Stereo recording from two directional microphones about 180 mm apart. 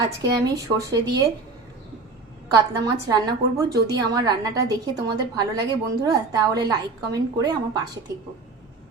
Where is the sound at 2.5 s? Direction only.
20° right (ahead or behind).